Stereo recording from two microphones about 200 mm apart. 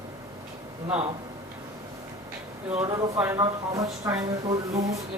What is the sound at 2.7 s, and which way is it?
Speech, 30° right (ahead or behind).